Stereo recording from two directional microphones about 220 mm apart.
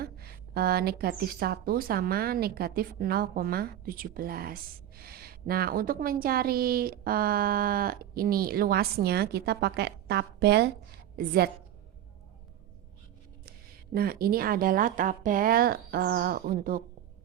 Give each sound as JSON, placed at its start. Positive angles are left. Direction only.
{"t": 0.0, "sound": "a woman's voice", "side_deg": -45}
{"t": 13.9, "sound": "speech", "side_deg": -45}